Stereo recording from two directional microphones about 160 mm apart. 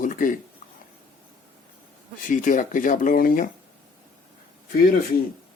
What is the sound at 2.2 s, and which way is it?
Speech, 55° left (ahead or behind).